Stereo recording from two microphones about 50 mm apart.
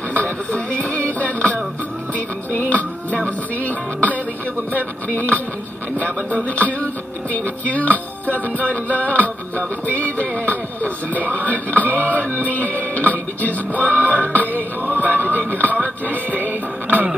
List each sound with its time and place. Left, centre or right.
0.1 s music: left
6.4 s music: left
12.4 s speech: left
13.7 s music: left
14.8 s a sound: right
15.1 s a sound: left